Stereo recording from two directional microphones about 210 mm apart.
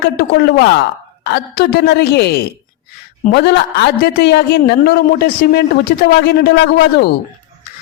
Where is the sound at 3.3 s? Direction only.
50° left (ahead or behind).